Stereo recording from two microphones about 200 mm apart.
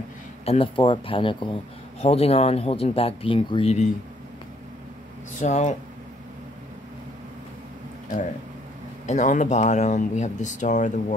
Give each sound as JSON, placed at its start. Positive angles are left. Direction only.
{"t": 0.5, "sound": "speech", "side_deg": 25}
{"t": 5.4, "sound": "speech", "side_deg": 35}
{"t": 9.0, "sound": "speech", "side_deg": 35}